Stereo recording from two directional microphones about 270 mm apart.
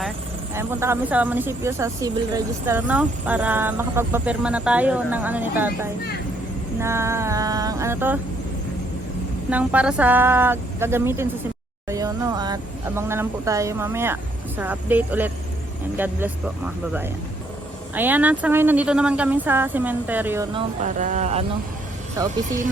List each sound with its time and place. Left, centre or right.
0.5 s speech: centre
9.5 s speech: centre
17.9 s speech: centre
20.8 s speech: right
22.2 s speech: centre